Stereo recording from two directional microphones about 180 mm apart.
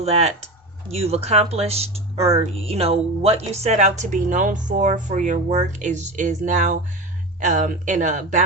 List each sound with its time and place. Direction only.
0.0 s speech: 35° right (ahead or behind)